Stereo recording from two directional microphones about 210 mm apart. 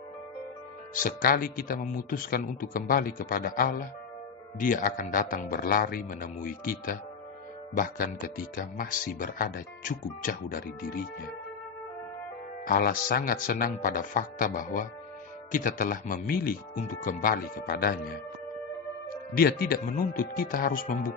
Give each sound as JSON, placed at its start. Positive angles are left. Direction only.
{"t": 0.9, "sound": "a man's voice", "side_deg": 40}
{"t": 12.6, "sound": "speech", "side_deg": 45}
{"t": 19.3, "sound": "a man's voice", "side_deg": 45}